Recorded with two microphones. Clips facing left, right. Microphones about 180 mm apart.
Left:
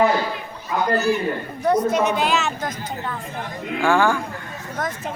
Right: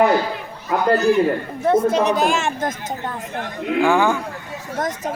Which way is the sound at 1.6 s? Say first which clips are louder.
Right 2 dB; 25° right (ahead or behind).